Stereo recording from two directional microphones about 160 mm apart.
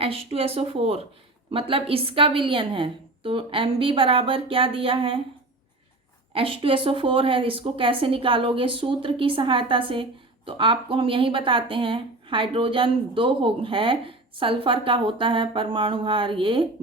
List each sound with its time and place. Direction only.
0.0 s speech: 35° right (ahead or behind)
6.3 s speech: 35° right (ahead or behind)